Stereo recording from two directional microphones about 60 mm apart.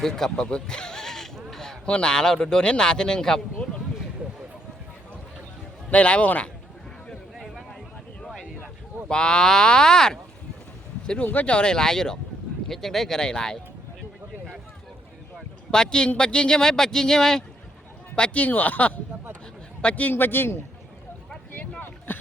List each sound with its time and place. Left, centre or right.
0.0 s speech: centre
5.9 s speech: left
7.3 s a sound: centre
9.0 s a man's voice: centre
15.7 s a man's voice: centre
18.1 s a man's voice: left
21.8 s a sound: left